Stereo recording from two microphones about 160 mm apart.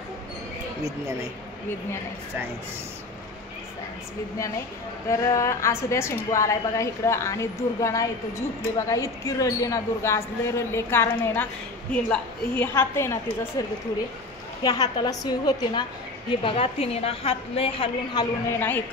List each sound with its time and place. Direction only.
5.2 s a woman's voice: 20° left (ahead or behind); by 18.2 s 35° left (ahead or behind)
18.6 s speech: 10° left (ahead or behind)